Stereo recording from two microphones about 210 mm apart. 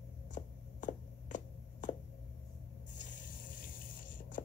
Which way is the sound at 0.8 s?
35° left (ahead or behind).